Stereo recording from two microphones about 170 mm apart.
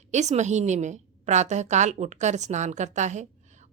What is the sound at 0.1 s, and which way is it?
A woman's voice, 40° right (ahead or behind).